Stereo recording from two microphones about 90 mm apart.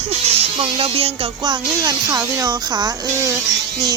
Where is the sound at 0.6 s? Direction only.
90° right.